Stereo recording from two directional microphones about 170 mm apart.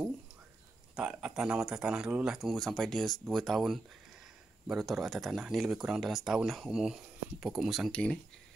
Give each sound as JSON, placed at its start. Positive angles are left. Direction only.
{"t": 0.9, "sound": "speech", "side_deg": -5}